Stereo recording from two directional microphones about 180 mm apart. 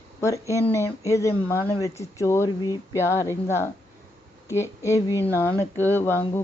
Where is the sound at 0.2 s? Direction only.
15° left (ahead or behind).